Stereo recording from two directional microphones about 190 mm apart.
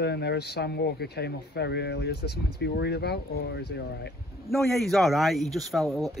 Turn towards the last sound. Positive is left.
turn(degrees=0)  # may be behind; listen again after turning